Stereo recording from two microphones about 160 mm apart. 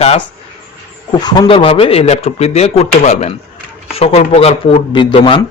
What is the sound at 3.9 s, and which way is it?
A man's voice, 35° left (ahead or behind).